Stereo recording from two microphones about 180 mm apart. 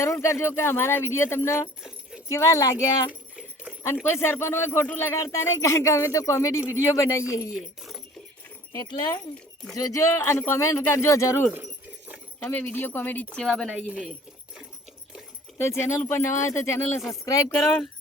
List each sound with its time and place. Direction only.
0.0 s speech: 15° left (ahead or behind)
8.7 s speech: 20° left (ahead or behind)
11.5 s a sound: 10° right (ahead or behind)
12.4 s speech: 10° left (ahead or behind)
15.5 s speech: 15° left (ahead or behind)